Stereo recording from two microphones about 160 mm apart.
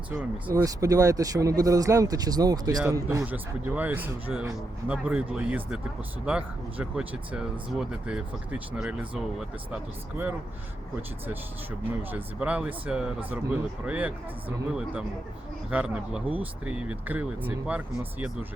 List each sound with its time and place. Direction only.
0.1 s speech: 10° right (ahead or behind)
0.5 s speech: 20° right (ahead or behind)
11.9 s speech: 10° right (ahead or behind)
15.7 s speech: 10° right (ahead or behind)